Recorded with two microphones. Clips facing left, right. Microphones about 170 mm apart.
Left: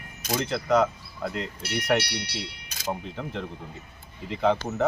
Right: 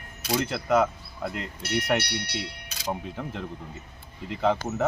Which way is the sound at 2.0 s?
60° right (ahead or behind).